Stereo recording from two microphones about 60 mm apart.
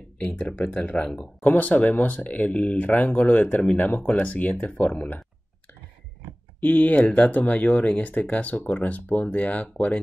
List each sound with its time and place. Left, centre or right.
0.4 s speech: left
6.6 s speech: left